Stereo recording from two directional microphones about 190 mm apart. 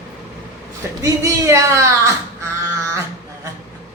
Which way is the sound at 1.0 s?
15° right (ahead or behind).